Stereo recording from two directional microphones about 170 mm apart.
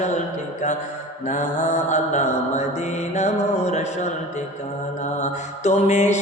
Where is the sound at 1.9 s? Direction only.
45° left (ahead or behind).